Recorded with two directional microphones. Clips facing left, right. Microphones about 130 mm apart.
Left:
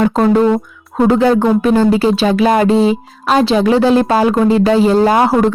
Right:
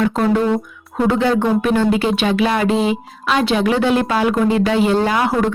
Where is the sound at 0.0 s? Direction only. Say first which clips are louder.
Left 5 dB; 35° left (ahead or behind).